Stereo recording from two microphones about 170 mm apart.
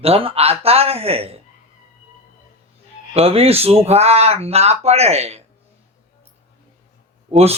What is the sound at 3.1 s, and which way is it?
Speech, 35° right (ahead or behind).